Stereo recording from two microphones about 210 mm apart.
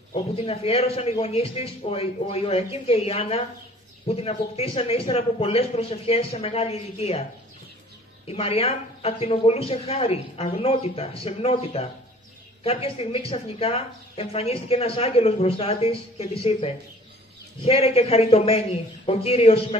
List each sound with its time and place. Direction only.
0.1 s speech: 30° left (ahead or behind)
8.3 s speech: 30° left (ahead or behind)